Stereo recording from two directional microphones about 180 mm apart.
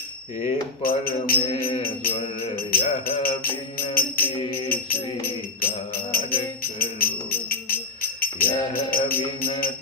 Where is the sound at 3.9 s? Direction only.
55° left (ahead or behind).